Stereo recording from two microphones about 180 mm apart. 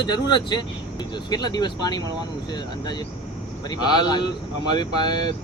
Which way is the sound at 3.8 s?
25° left (ahead or behind).